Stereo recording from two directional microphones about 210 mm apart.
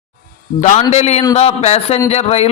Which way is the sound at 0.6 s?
30° left (ahead or behind).